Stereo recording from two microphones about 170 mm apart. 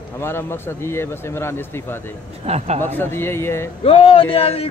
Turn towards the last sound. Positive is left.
turn(degrees=35)  # may be behind; listen again after turning